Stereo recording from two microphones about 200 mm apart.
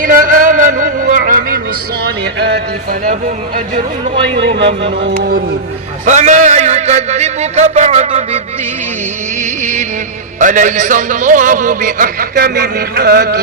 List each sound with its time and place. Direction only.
0.0 s a sound: 45° right (ahead or behind)
4.4 s speech: 60° right (ahead or behind)
5.1 s speech: 50° right (ahead or behind)
6.1 s a man's voice: 35° right (ahead or behind)
10.4 s a man's voice: 40° right (ahead or behind)